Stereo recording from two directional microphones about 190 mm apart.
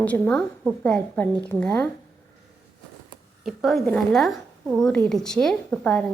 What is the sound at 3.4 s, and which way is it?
A woman's voice, centre (ahead or behind).